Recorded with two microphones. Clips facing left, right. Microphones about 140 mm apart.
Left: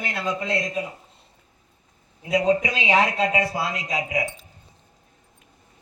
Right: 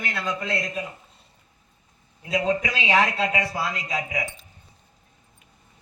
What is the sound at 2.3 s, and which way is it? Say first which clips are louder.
A man's voice: left 3 dB; 25° left (ahead or behind).